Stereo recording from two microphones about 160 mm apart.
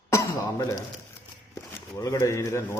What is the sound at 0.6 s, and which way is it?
A man's voice, 25° left (ahead or behind).